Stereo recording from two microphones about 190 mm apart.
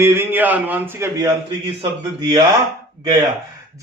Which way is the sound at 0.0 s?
15° right (ahead or behind).